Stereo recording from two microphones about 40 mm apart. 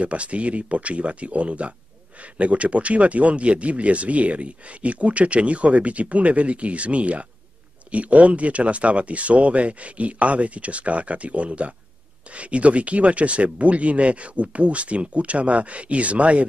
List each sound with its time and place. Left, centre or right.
0.0 s speech: right